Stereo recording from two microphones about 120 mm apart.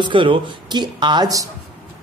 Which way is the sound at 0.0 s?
45° right (ahead or behind).